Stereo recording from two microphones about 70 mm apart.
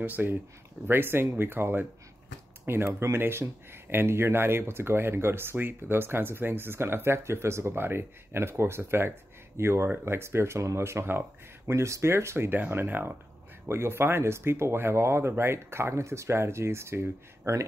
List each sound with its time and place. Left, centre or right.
0.0 s speech: right